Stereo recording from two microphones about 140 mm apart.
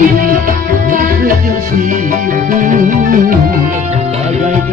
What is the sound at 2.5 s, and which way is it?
Music, 75° right (ahead or behind).